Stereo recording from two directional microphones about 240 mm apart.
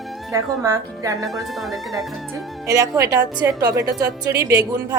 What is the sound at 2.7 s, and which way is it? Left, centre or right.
A woman's voice, centre.